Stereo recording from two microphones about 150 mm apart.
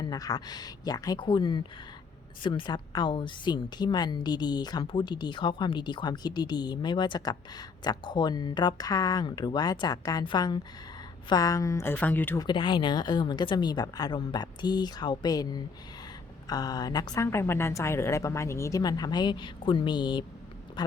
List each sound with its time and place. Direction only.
0.0 s a woman's voice: 25° left (ahead or behind)
12.4 s a woman's voice: 30° left (ahead or behind)